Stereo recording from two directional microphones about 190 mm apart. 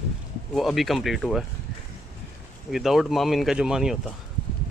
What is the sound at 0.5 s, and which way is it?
Speech, centre (ahead or behind).